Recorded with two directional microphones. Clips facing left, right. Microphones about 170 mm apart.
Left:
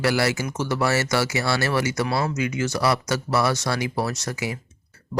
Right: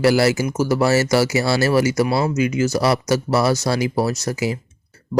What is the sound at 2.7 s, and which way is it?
Speech, 35° right (ahead or behind).